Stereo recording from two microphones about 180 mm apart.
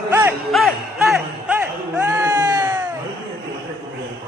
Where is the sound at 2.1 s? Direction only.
20° right (ahead or behind).